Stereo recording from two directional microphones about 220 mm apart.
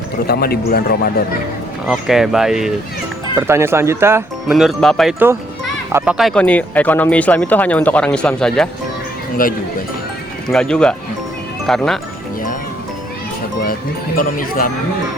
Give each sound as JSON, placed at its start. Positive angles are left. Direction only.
{"t": 0.3, "sound": "a man's voice", "side_deg": 45}
{"t": 1.9, "sound": "speech", "side_deg": 0}
{"t": 4.5, "sound": "speech", "side_deg": 0}
{"t": 5.9, "sound": "a child's voice", "side_deg": -10}
{"t": 6.1, "sound": "speech", "side_deg": 0}
{"t": 9.4, "sound": "speech", "side_deg": 40}
{"t": 10.5, "sound": "speech", "side_deg": 5}
{"t": 14.2, "sound": "speech", "side_deg": 40}